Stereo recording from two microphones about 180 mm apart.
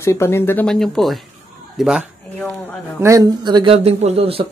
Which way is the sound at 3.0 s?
20° right (ahead or behind).